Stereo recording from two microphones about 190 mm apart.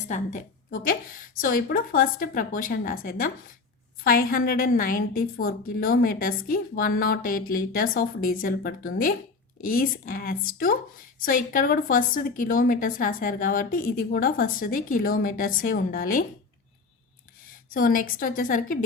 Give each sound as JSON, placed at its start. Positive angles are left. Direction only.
{"t": 0.1, "sound": "a woman's voice", "side_deg": 40}
{"t": 17.7, "sound": "a woman's voice", "side_deg": 50}